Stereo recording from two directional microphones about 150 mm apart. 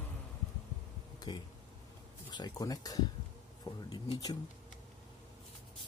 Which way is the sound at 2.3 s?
25° left (ahead or behind).